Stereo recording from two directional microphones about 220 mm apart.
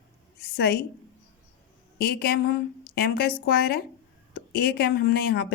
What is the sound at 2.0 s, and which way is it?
A woman's voice, 45° left (ahead or behind).